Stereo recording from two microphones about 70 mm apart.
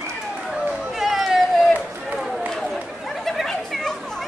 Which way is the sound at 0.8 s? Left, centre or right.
Centre.